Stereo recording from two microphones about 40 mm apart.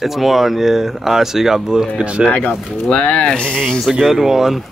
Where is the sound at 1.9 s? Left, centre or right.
Right.